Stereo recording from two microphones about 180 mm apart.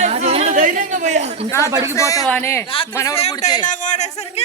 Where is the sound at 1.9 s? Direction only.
15° left (ahead or behind).